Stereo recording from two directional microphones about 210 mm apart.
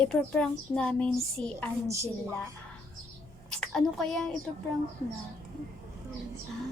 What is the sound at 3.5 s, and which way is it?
Speech, 5° left (ahead or behind).